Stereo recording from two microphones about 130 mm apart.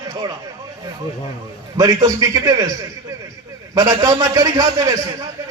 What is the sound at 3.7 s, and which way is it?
A man's voice, 25° right (ahead or behind).